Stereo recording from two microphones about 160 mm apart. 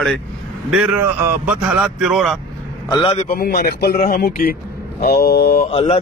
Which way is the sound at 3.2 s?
70° left (ahead or behind).